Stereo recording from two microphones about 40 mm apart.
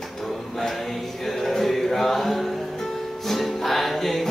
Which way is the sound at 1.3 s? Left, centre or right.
Centre.